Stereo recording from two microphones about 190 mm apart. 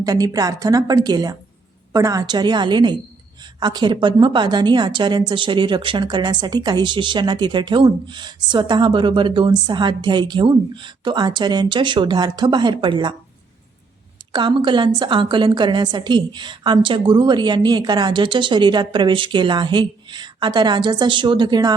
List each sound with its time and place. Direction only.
0.0 s a woman's voice: 20° right (ahead or behind)
14.3 s a woman's voice: 25° right (ahead or behind)